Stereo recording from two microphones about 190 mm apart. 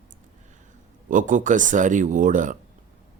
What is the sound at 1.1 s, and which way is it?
Speech, 45° right (ahead or behind).